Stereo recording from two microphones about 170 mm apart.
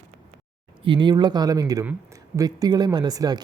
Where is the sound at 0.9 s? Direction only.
25° right (ahead or behind).